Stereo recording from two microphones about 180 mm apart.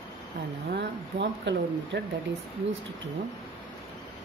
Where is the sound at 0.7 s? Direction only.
75° right (ahead or behind).